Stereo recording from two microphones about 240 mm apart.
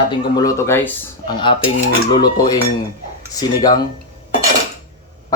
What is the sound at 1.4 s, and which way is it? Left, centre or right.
Typewriter, centre.